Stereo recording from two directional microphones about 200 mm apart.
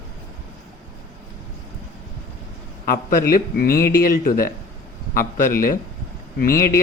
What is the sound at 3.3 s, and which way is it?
Speech, 50° left (ahead or behind).